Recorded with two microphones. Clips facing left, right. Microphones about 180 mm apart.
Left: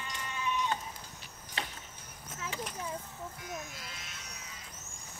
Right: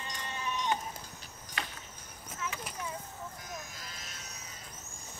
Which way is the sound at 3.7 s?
40° right (ahead or behind).